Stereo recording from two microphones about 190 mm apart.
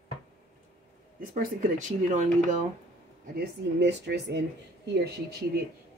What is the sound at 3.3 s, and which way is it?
Speech, 60° right (ahead or behind).